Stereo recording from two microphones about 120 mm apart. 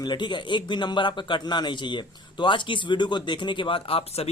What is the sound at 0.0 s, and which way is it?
Speech, 40° left (ahead or behind).